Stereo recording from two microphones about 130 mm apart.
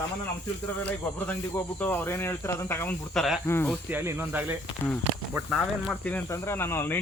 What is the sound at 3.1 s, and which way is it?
Speech, centre (ahead or behind).